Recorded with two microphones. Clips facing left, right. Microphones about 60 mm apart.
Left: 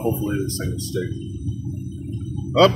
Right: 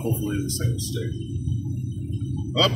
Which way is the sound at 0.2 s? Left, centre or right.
Left.